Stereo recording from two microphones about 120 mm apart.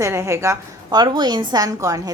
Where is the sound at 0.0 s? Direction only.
25° right (ahead or behind).